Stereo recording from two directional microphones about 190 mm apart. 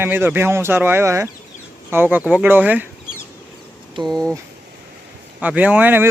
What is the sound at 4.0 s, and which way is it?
Speech, centre (ahead or behind).